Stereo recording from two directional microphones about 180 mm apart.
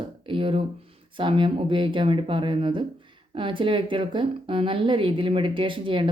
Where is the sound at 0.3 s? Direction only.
30° right (ahead or behind).